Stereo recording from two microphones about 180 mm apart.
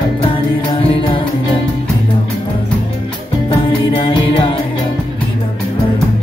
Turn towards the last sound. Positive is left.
turn(degrees=30)  # may be behind; listen again after turning